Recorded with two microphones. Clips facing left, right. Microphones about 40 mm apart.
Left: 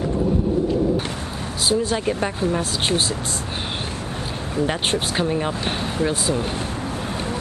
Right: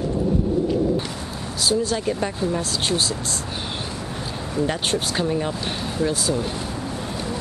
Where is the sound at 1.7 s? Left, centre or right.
Left.